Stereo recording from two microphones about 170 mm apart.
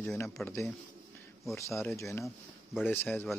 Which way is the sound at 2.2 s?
5° right (ahead or behind).